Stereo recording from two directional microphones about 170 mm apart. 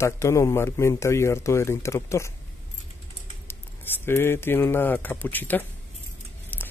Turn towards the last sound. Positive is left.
turn(degrees=10)  # may be behind; listen again after turning